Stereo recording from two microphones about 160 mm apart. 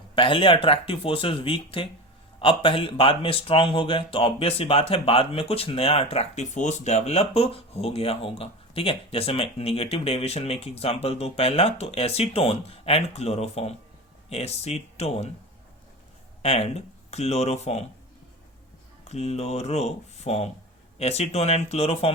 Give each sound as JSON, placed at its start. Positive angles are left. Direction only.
{"t": 0.2, "sound": "speech", "side_deg": 35}
{"t": 16.4, "sound": "speech", "side_deg": 40}
{"t": 19.0, "sound": "speech", "side_deg": 40}